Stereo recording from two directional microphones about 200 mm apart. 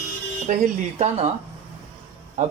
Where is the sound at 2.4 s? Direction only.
35° right (ahead or behind).